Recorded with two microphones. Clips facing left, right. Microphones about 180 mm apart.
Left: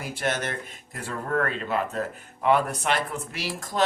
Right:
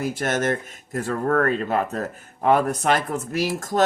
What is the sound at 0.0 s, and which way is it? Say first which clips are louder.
Speech: right 6 dB; 45° right (ahead or behind).